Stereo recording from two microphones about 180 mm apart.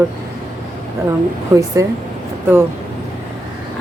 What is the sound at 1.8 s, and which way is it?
Speech, 20° right (ahead or behind).